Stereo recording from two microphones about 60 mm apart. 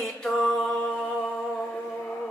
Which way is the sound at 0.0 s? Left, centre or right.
Centre.